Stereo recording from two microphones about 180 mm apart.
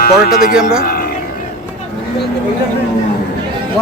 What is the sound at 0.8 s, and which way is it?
Roaring cats, 55° left (ahead or behind).